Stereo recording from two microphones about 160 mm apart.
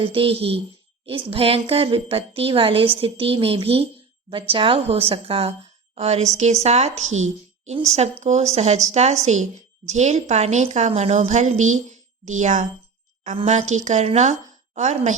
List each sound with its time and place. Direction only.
0.0 s a woman's voice: 35° right (ahead or behind)